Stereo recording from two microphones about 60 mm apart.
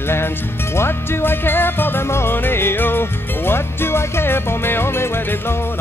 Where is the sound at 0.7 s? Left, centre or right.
Left.